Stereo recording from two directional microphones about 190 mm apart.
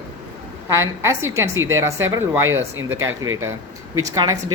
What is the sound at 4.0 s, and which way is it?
Speech, 20° right (ahead or behind).